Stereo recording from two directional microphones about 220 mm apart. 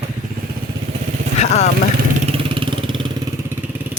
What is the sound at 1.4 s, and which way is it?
Speech, 30° left (ahead or behind).